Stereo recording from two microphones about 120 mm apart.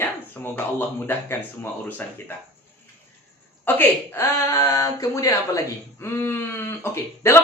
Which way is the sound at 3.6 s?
15° left (ahead or behind).